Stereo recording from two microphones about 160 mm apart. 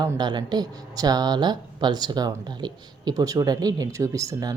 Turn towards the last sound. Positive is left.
turn(degrees=-20)  # may be behind; listen again after turning